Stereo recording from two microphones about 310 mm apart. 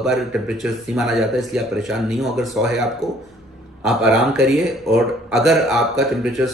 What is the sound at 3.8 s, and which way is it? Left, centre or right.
Speech, centre.